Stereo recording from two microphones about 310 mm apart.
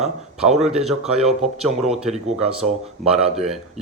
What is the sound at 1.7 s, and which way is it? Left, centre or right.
Speech, right.